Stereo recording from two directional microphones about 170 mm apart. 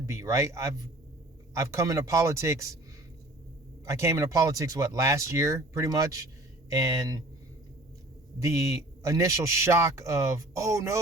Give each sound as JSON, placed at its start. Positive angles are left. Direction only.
{"t": 0.0, "sound": "a man's voice", "side_deg": -15}
{"t": 3.8, "sound": "a man's voice", "side_deg": -15}
{"t": 8.4, "sound": "a man's voice", "side_deg": -20}